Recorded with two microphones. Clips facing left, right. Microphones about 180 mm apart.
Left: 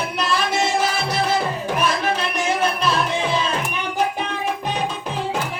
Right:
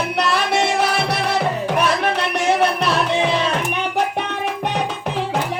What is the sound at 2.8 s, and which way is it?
Music, 65° right (ahead or behind).